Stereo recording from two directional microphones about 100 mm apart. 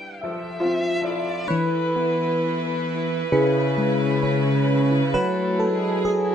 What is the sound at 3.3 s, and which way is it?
Music, centre (ahead or behind).